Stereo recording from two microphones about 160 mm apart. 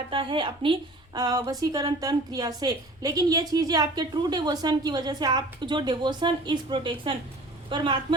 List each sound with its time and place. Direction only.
0.1 s a woman's voice: 30° right (ahead or behind)